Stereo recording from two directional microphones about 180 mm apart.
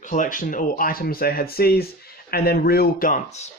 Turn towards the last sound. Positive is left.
turn(degrees=40)  # may be behind; listen again after turning